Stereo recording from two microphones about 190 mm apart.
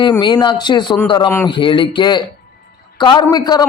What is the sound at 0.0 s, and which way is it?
A man's voice, 25° left (ahead or behind).